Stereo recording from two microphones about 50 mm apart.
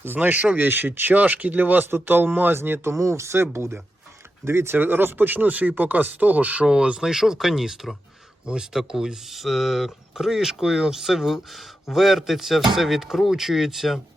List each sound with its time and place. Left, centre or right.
0.0 s a man's voice: right
2.9 s speech: right
6.7 s speech: centre
7.1 s speech: centre